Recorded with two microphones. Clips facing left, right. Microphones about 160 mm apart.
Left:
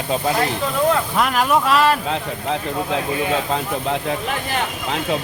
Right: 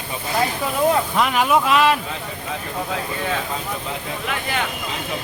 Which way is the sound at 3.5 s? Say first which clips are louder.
Left 6 dB; 65° left (ahead or behind).